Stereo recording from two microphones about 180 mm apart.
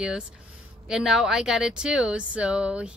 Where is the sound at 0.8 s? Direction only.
5° right (ahead or behind).